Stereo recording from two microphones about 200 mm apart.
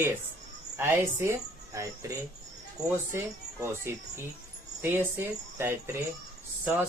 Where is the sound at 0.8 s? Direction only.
15° right (ahead or behind).